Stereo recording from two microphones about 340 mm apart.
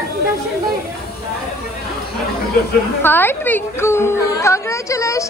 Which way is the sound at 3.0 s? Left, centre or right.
Centre.